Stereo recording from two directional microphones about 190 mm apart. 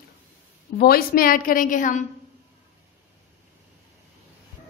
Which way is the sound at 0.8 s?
50° left (ahead or behind).